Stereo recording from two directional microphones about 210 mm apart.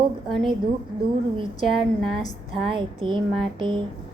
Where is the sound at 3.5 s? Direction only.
25° right (ahead or behind).